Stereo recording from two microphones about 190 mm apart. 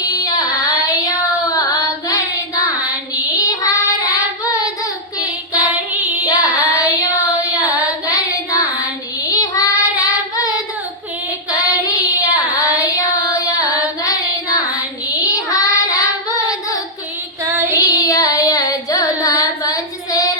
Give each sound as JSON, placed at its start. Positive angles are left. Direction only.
{"t": 0.1, "sound": "child singing", "side_deg": 20}
{"t": 3.3, "sound": "child singing", "side_deg": 20}
{"t": 6.2, "sound": "child singing", "side_deg": 20}
{"t": 17.4, "sound": "child singing", "side_deg": -15}
{"t": 17.7, "sound": "child singing", "side_deg": 20}